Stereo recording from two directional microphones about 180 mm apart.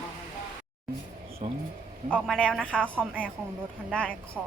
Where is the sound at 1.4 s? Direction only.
40° right (ahead or behind).